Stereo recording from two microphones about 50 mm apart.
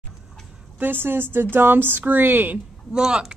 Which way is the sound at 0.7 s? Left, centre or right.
Right.